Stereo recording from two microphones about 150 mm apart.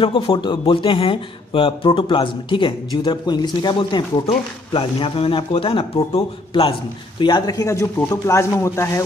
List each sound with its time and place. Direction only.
0.0 s speech: 30° left (ahead or behind)